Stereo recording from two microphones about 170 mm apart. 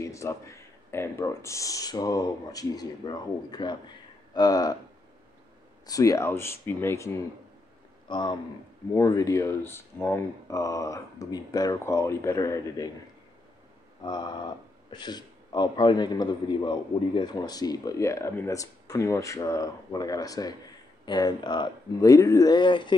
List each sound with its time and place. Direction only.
0.0 s a man's voice: 15° left (ahead or behind)
5.9 s speech: 20° left (ahead or behind)
8.1 s a man's voice: 25° left (ahead or behind)
14.0 s a man's voice: 25° left (ahead or behind)